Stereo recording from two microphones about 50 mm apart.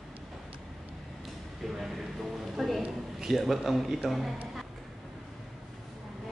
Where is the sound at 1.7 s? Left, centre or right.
Centre.